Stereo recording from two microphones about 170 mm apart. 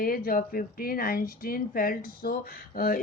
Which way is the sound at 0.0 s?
60° left (ahead or behind).